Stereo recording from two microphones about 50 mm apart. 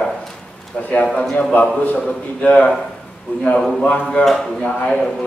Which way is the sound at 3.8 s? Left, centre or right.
Left.